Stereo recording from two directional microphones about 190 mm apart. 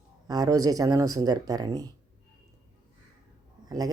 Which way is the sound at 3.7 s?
20° right (ahead or behind).